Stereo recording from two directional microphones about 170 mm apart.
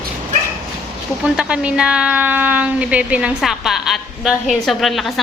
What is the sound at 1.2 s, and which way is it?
A woman's voice, 5° right (ahead or behind).